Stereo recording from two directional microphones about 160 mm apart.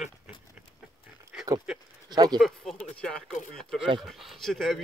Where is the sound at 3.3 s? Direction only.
50° left (ahead or behind).